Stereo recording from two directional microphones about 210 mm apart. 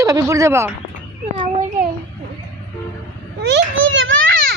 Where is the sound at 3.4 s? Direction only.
60° right (ahead or behind).